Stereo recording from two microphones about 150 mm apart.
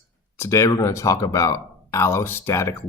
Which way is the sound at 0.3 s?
20° left (ahead or behind).